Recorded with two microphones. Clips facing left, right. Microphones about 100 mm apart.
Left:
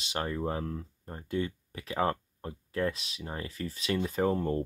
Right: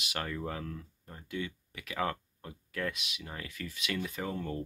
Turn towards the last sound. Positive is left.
turn(degrees=35)  # may be behind; listen again after turning